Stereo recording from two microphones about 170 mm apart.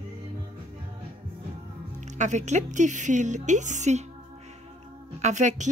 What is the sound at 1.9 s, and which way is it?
Speech, 45° right (ahead or behind).